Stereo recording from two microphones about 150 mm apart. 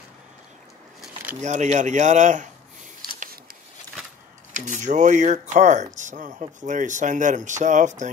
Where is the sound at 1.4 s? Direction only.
50° right (ahead or behind).